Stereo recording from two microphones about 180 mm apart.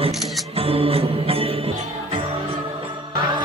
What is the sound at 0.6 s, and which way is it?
Mantra, 30° right (ahead or behind).